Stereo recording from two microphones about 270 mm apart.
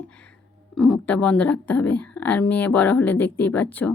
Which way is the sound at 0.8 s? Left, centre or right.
Centre.